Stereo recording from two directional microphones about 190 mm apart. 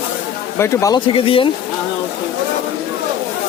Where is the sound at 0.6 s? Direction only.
15° left (ahead or behind).